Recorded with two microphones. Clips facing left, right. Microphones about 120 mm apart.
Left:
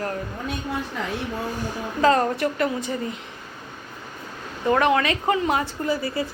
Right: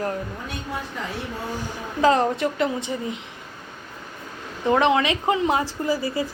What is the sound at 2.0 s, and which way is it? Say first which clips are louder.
Speech: even; 20° right (ahead or behind).